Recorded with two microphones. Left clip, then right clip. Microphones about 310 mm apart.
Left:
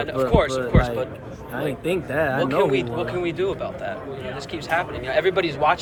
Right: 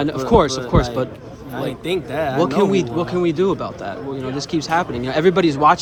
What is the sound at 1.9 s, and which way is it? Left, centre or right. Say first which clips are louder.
Speech: right 1 dB; centre.